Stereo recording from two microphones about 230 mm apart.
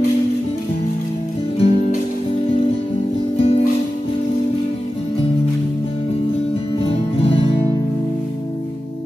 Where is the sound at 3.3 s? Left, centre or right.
Left.